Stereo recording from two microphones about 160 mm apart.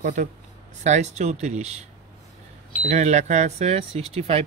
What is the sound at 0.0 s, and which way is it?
Speech, 55° right (ahead or behind).